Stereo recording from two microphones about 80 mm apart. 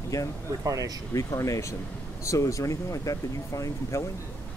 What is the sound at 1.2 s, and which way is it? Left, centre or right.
Speech, left.